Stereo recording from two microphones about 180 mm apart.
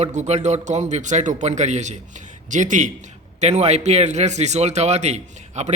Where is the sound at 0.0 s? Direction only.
40° right (ahead or behind).